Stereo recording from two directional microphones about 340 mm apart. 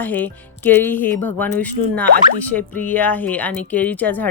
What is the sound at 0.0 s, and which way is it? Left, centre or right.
Speech, centre.